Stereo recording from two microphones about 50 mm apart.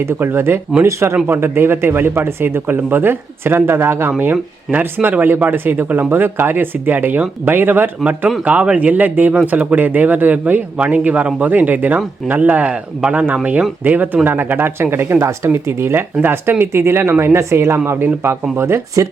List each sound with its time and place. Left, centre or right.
0.2 s speech: right
0.9 s speech: right
1.1 s speech: right
4.2 s speech: right
8.4 s speech: right
12.7 s speech: right
15.5 s speech: right